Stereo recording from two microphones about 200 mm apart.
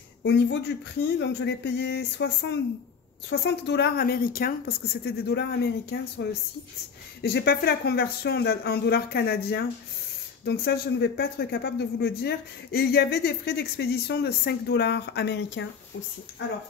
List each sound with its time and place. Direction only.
0.2 s speech: 60° left (ahead or behind)
7.2 s speech: 50° left (ahead or behind)